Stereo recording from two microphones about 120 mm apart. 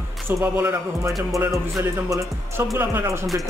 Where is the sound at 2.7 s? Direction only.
20° right (ahead or behind).